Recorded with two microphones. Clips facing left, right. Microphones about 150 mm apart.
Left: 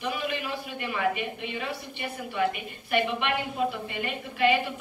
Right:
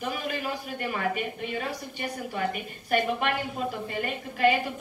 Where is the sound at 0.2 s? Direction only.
40° right (ahead or behind).